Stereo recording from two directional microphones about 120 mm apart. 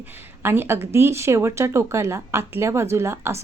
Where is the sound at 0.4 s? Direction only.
20° right (ahead or behind).